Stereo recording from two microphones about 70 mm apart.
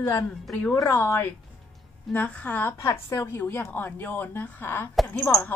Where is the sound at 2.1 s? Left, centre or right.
Left.